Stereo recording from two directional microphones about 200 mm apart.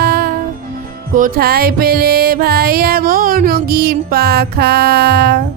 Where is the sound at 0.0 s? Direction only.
50° right (ahead or behind).